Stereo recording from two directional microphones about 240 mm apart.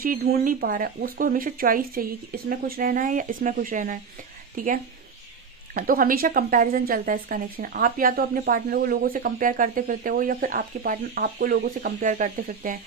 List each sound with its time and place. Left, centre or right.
0.0 s a woman's voice: right
5.8 s a woman's voice: right